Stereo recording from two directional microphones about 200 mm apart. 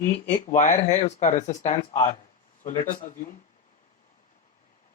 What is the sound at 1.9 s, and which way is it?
Speech, 20° left (ahead or behind).